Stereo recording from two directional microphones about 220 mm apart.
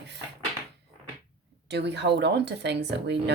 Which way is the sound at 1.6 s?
50° right (ahead or behind).